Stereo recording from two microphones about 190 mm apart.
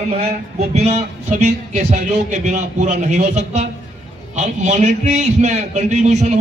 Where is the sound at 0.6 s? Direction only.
35° right (ahead or behind).